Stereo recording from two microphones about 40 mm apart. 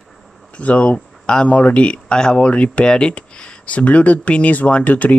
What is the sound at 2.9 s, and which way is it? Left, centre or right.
Speech, left.